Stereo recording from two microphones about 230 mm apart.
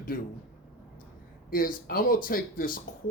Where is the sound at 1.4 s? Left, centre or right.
Left.